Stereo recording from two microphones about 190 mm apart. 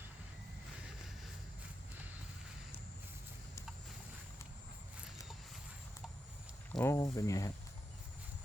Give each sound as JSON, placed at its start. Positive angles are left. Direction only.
{"t": 6.7, "sound": "speech", "side_deg": 15}